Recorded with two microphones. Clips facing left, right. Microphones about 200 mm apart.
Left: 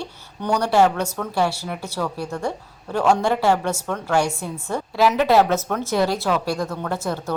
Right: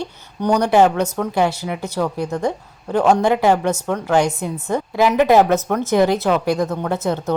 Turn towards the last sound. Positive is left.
turn(degrees=-20)  # may be behind; listen again after turning